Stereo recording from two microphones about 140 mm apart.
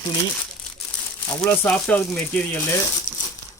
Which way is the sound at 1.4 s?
10° left (ahead or behind).